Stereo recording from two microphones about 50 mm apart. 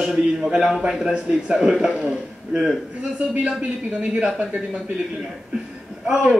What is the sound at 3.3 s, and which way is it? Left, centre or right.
Speech, right.